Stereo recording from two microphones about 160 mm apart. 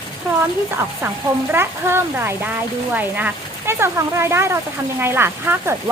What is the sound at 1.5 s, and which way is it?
Speech, 15° right (ahead or behind).